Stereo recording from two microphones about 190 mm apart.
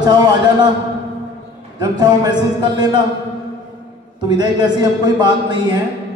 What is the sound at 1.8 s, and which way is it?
A man's voice, 20° right (ahead or behind).